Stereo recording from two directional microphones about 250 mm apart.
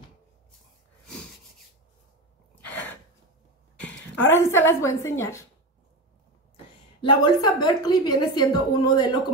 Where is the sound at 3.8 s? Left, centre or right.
Centre.